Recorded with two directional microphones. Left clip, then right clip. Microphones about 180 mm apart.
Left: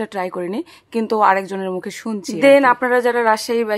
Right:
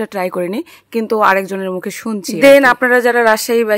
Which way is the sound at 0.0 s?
20° right (ahead or behind).